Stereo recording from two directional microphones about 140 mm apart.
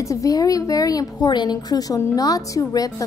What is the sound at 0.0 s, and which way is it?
A woman's voice, 25° left (ahead or behind).